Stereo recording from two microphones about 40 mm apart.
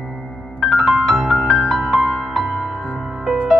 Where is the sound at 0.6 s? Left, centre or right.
Centre.